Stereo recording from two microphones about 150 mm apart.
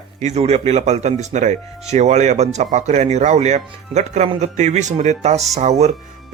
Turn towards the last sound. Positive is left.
turn(degrees=-50)  # may be behind; listen again after turning